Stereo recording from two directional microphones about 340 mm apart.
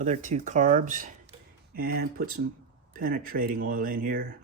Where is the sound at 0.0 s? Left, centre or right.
Right.